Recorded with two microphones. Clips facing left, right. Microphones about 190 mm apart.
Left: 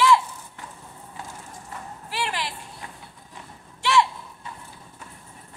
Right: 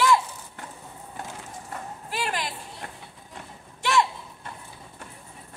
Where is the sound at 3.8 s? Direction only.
45° right (ahead or behind).